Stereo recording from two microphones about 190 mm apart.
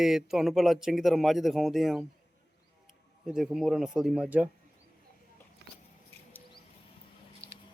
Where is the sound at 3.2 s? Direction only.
Centre (ahead or behind).